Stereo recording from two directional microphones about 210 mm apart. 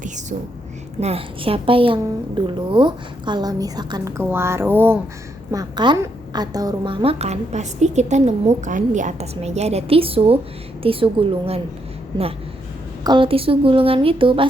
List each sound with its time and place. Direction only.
0.9 s a woman's voice: 30° right (ahead or behind)
13.1 s a woman's voice: 25° right (ahead or behind)